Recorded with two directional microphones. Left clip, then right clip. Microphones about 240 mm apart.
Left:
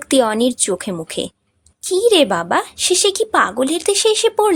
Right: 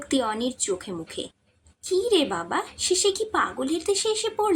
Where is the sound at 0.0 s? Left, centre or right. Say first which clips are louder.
Left 11 dB; left.